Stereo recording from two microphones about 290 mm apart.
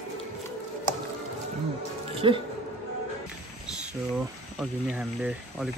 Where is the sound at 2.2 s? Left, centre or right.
Centre.